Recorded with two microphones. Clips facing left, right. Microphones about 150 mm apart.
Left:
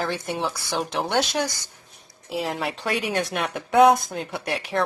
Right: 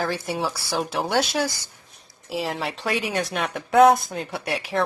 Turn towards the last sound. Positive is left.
turn(degrees=0)  # may be behind; listen again after turning